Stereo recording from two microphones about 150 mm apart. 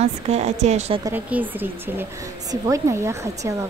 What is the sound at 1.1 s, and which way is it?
A woman's voice, 10° right (ahead or behind).